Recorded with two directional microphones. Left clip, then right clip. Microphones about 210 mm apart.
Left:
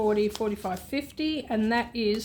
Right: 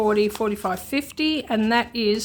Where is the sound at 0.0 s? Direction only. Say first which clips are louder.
Right 5 dB; 30° right (ahead or behind).